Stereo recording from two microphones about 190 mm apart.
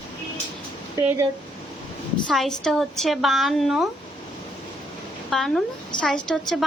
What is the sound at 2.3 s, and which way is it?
A woman's voice, 5° left (ahead or behind).